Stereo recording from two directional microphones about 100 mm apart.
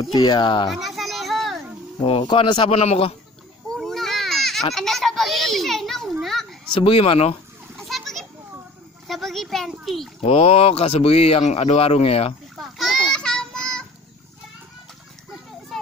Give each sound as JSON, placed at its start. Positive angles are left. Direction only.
{"t": 0.0, "sound": "speech", "side_deg": 45}
{"t": 0.7, "sound": "children playing", "side_deg": 0}
{"t": 2.0, "sound": "speech", "side_deg": 65}
{"t": 2.7, "sound": "a man's voice", "side_deg": 90}
{"t": 3.7, "sound": "a sound", "side_deg": 0}
{"t": 4.7, "sound": "a child's voice", "side_deg": 0}
{"t": 6.8, "sound": "a man's voice", "side_deg": 65}
{"t": 7.7, "sound": "splash", "side_deg": 0}
{"t": 9.0, "sound": "a child's voice", "side_deg": 0}
{"t": 10.2, "sound": "a man's voice", "side_deg": 70}
{"t": 12.5, "sound": "a sound", "side_deg": 0}
{"t": 15.7, "sound": "children playing", "side_deg": 0}